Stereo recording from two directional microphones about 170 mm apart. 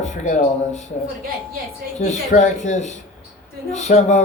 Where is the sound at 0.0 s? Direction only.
45° left (ahead or behind).